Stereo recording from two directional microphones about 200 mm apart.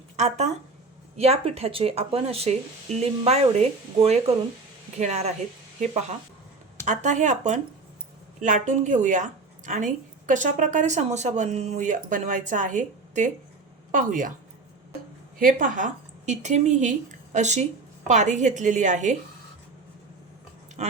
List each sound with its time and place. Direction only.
0.2 s a woman's voice: 35° right (ahead or behind)
6.8 s a woman's voice: 35° right (ahead or behind)
15.4 s a woman's voice: 45° right (ahead or behind)
20.8 s speech: 35° right (ahead or behind)